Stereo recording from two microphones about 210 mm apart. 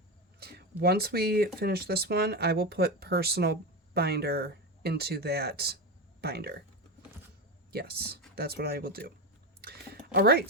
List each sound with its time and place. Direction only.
0.3 s speech: 50° right (ahead or behind)
7.7 s speech: 50° right (ahead or behind)
9.6 s a sound: 45° right (ahead or behind)